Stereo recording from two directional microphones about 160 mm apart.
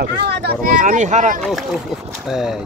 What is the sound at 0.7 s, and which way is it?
Speech, 50° right (ahead or behind).